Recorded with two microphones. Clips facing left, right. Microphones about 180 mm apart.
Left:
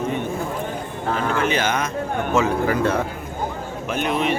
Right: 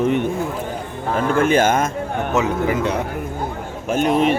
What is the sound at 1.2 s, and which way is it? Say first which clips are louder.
Speech: right 7 dB; 50° right (ahead or behind).